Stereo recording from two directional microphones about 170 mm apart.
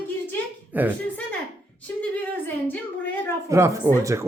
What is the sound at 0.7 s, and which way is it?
Speech, 10° right (ahead or behind).